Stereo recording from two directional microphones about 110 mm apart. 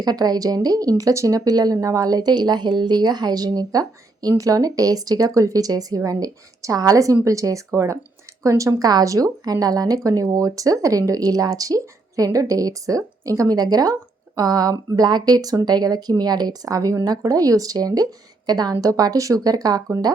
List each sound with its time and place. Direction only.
0.0 s a woman's voice: 35° right (ahead or behind)